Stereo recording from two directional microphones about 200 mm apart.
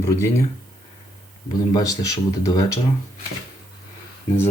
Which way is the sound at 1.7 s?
15° left (ahead or behind).